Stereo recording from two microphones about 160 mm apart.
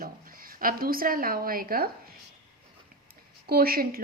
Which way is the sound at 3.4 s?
70° right (ahead or behind).